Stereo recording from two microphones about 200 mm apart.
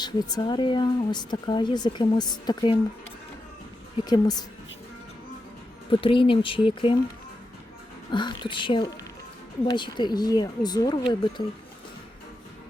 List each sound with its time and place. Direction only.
0.0 s a woman's voice: 20° left (ahead or behind)
4.0 s a woman's voice: 20° left (ahead or behind)
5.9 s a woman's voice: 25° left (ahead or behind)
8.1 s a woman's voice: 20° left (ahead or behind)